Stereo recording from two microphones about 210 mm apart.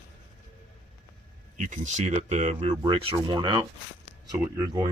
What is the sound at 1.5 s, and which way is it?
Speech, 35° right (ahead or behind).